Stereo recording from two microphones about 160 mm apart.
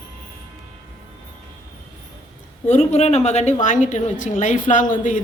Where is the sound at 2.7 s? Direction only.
45° left (ahead or behind).